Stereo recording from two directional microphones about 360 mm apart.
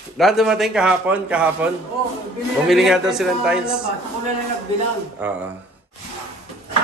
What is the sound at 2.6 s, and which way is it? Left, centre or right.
Speech, centre.